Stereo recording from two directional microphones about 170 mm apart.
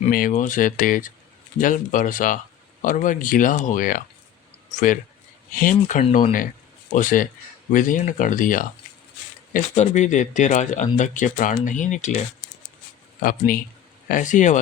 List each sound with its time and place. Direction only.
0.1 s speech: 55° left (ahead or behind)
13.2 s speech: 55° left (ahead or behind)